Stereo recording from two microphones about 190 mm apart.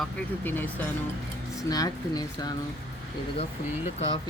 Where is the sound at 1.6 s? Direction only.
20° left (ahead or behind).